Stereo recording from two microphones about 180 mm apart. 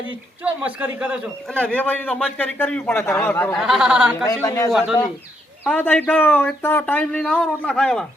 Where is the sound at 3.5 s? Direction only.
Centre (ahead or behind).